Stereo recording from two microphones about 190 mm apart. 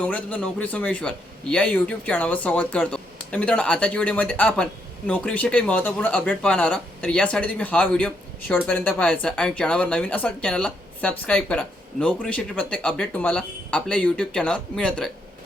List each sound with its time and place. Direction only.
0.0 s a man's voice: 5° left (ahead or behind)